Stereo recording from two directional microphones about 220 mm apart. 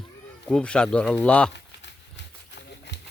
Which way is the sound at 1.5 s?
50° left (ahead or behind).